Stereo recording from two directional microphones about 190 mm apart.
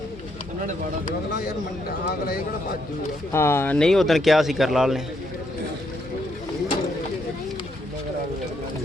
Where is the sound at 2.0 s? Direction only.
50° left (ahead or behind).